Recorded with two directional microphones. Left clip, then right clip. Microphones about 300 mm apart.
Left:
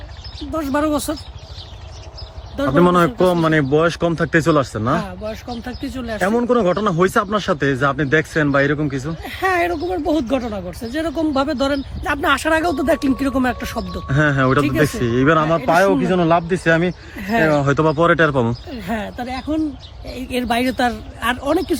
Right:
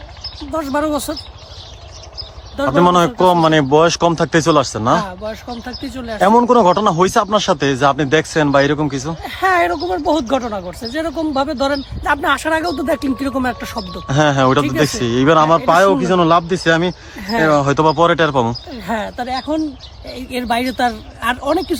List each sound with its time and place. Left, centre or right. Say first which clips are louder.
0.5 s speech: right 1 dB; centre
2.6 s speech: right 2 dB; centre